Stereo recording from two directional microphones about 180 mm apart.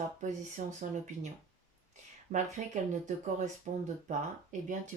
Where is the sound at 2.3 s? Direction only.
35° right (ahead or behind).